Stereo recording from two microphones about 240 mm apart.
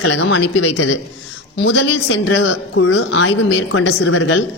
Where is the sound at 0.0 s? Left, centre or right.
Left.